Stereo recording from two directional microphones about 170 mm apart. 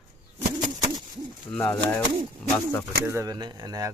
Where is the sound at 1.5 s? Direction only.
10° left (ahead or behind).